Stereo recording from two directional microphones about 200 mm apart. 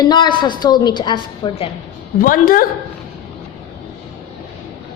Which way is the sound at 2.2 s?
45° left (ahead or behind).